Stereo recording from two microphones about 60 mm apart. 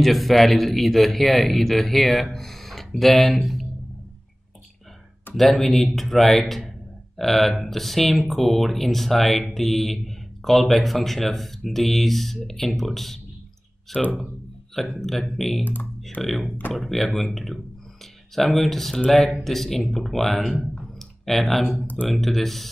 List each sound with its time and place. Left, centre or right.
0.0 s speech: centre
5.3 s speech: centre
15.6 s speech: left
16.2 s speech: centre